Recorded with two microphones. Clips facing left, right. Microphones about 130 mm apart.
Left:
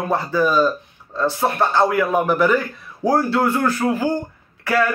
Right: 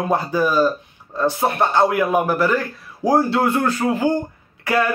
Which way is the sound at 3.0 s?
20° right (ahead or behind).